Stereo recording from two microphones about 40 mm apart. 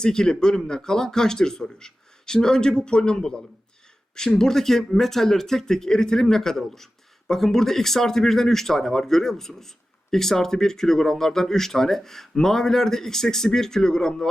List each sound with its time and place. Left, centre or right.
0.0 s speech: centre